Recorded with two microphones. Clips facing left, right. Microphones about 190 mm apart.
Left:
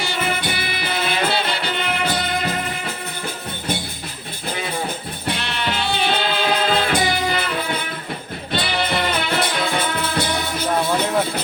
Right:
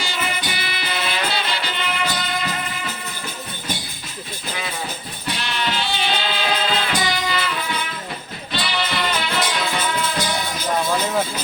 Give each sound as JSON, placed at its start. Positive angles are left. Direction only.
{"t": 0.0, "sound": "music", "side_deg": 60}
{"t": 5.4, "sound": "music", "side_deg": 55}